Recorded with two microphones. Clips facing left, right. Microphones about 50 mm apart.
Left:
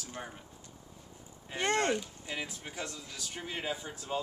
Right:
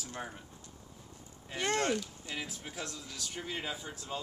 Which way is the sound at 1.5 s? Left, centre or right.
Centre.